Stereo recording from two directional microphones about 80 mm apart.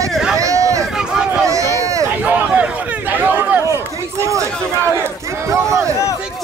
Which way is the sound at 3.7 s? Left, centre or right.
Right.